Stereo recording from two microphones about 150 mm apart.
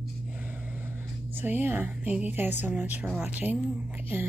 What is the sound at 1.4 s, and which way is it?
A woman's voice, 10° right (ahead or behind).